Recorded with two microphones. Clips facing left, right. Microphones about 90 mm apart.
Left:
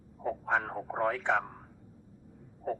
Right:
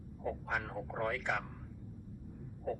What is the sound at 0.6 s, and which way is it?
Speech, 45° left (ahead or behind).